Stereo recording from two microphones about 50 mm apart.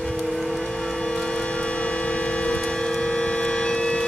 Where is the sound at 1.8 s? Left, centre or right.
Left.